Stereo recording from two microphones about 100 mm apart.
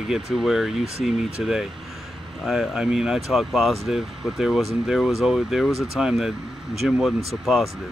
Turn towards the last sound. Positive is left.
turn(degrees=0)  # may be behind; listen again after turning